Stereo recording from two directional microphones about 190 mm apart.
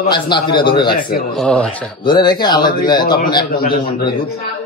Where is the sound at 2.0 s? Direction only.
25° left (ahead or behind).